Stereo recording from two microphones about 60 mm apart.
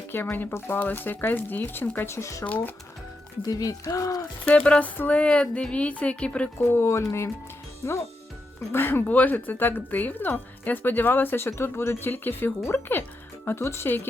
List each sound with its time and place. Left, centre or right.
0.1 s speech: left
2.0 s speech: left
2.4 s a woman's voice: left
3.5 s speech: left
4.5 s a woman's voice: left
6.6 s speech: left
8.7 s speech: left
9.0 s speech: left